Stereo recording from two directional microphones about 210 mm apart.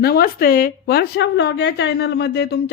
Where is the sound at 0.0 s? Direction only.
45° left (ahead or behind).